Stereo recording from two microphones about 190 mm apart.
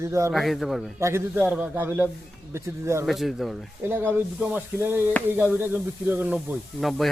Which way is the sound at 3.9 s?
10° right (ahead or behind).